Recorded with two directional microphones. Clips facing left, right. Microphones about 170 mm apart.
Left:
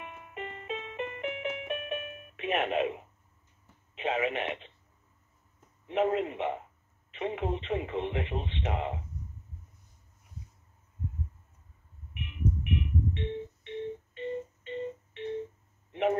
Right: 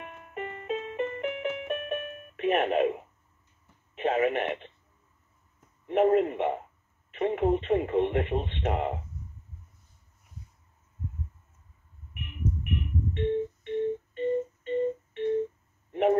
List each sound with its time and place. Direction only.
0.0 s music: 50° right (ahead or behind)
3.9 s telephone: 50° right (ahead or behind)
5.9 s speech: 50° right (ahead or behind)
12.6 s telephone dialing: 45° right (ahead or behind)
15.9 s a sound: 45° right (ahead or behind)